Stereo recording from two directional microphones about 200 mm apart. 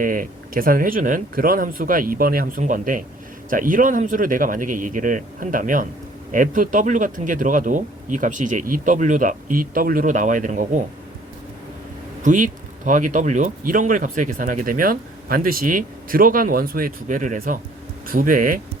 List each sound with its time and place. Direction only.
0.0 s speech: 45° right (ahead or behind)
12.2 s speech: 40° right (ahead or behind)